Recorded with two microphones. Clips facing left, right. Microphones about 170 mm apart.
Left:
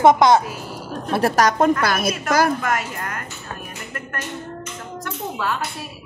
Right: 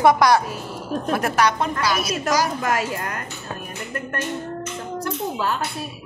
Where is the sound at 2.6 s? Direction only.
35° right (ahead or behind).